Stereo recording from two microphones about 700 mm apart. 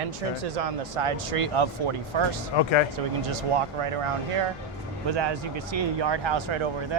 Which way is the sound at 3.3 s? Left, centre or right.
Right.